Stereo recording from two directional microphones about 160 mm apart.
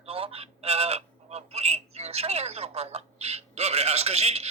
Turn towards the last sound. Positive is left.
turn(degrees=-40)  # may be behind; listen again after turning